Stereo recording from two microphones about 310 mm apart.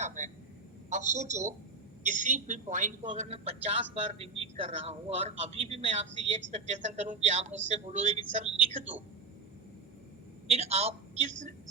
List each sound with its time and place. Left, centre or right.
0.0 s a sound: right
0.9 s a man's voice: right
10.5 s a man's voice: centre